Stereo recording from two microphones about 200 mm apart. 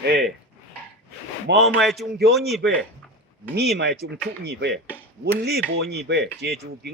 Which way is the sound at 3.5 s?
55° right (ahead or behind).